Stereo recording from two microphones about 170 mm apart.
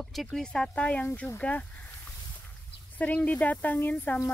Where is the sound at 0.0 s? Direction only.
Centre (ahead or behind).